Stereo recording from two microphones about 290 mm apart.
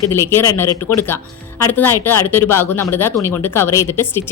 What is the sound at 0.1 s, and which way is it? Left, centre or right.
Speech, centre.